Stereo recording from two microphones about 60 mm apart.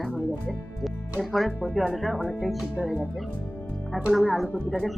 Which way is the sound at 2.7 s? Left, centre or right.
Right.